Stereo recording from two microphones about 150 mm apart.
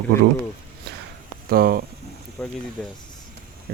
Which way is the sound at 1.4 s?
85° right.